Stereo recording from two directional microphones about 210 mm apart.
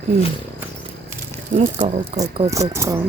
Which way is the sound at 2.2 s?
15° right (ahead or behind).